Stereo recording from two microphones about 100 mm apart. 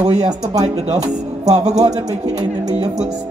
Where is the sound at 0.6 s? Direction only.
90° right.